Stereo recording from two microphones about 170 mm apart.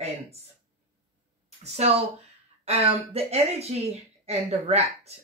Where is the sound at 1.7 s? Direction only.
35° right (ahead or behind).